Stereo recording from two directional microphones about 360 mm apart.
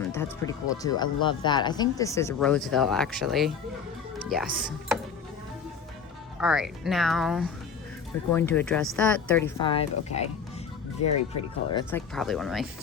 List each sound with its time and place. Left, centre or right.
0.1 s speech: centre
6.4 s speech: centre
11.7 s speech: centre